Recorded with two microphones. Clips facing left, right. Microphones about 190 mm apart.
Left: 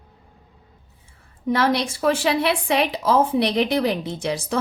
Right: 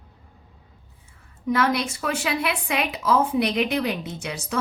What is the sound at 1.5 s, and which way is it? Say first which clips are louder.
A woman's voice: left 2 dB; 30° left (ahead or behind).